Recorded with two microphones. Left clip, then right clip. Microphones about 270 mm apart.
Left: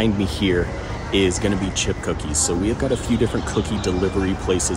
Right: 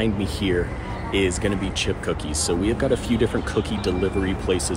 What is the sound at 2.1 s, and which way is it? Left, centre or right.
Speech, centre.